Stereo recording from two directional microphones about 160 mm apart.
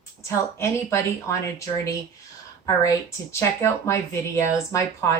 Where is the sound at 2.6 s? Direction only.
20° left (ahead or behind).